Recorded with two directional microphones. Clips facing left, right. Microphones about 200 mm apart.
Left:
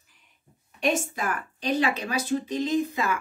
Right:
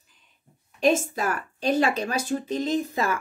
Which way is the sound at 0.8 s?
40° right (ahead or behind).